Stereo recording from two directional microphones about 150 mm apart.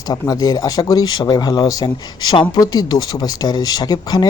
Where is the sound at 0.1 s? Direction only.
25° left (ahead or behind).